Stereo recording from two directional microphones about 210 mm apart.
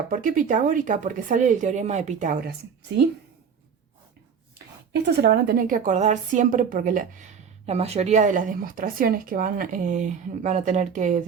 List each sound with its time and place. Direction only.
0.1 s a woman's voice: 40° right (ahead or behind)
5.1 s a woman's voice: 50° right (ahead or behind)